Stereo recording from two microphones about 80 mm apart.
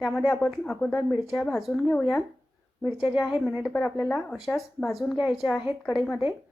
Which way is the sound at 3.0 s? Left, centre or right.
Centre.